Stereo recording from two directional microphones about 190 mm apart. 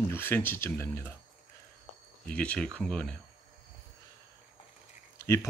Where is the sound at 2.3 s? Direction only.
5° left (ahead or behind).